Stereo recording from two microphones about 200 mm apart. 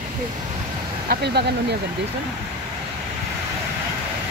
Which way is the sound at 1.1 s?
55° right (ahead or behind).